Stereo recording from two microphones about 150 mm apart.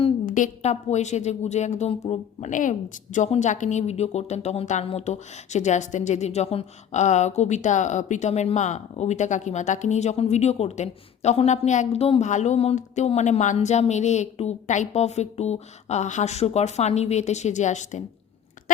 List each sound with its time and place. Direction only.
0.3 s a woman's voice: 60° left (ahead or behind); by 12.3 s 40° left (ahead or behind)
12.3 s a woman's voice: 50° left (ahead or behind)